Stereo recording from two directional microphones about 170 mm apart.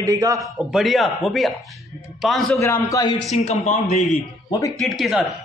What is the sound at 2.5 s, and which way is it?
Speech, 15° left (ahead or behind).